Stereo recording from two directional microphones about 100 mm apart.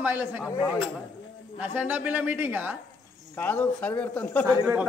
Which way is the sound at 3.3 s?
20° left (ahead or behind).